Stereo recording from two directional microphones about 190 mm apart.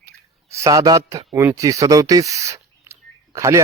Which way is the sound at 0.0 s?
15° right (ahead or behind).